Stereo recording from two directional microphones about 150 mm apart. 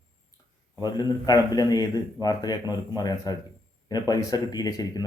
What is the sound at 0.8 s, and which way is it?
Speech, 25° left (ahead or behind).